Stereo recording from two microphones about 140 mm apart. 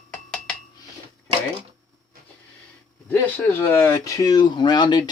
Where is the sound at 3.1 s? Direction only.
15° left (ahead or behind).